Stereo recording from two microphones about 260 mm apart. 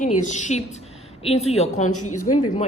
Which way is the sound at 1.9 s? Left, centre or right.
Left.